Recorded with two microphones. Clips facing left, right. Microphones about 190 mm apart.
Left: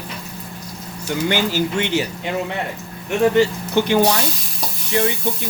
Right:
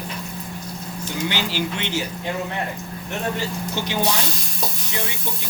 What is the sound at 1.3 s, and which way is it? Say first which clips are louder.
Speech: left 7 dB; 50° left (ahead or behind).